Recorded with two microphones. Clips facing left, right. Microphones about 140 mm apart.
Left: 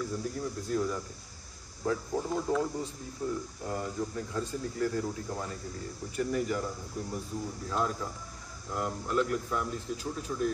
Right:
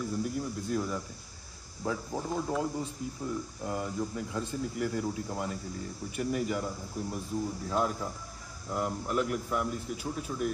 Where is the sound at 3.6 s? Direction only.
15° right (ahead or behind).